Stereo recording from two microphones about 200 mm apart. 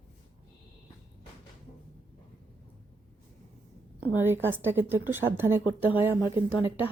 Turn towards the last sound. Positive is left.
turn(degrees=-10)  # may be behind; listen again after turning